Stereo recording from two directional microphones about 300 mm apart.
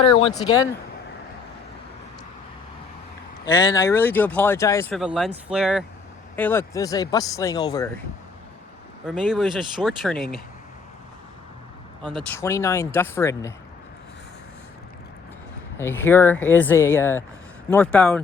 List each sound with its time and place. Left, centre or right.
0.0 s a sound: centre
0.3 s speech: centre
3.4 s speech: centre
9.0 s speech: centre
12.0 s speech: centre
15.8 s speech: centre